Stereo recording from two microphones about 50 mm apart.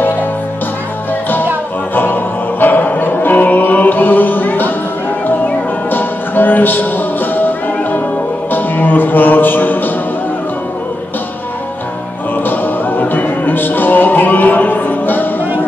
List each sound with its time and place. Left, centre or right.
2.6 s music: left
12.4 s music: left